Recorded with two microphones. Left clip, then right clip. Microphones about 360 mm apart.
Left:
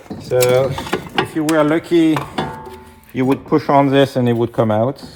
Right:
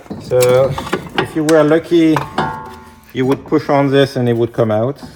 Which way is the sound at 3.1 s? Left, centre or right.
Left.